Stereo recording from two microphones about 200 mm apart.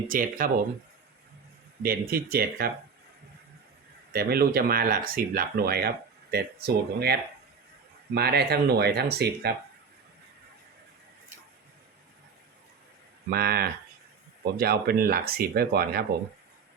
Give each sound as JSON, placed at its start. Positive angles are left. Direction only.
{"t": 0.1, "sound": "speech", "side_deg": -45}
{"t": 1.8, "sound": "speech", "side_deg": -45}
{"t": 4.1, "sound": "speech", "side_deg": -50}
{"t": 13.3, "sound": "speech", "side_deg": -50}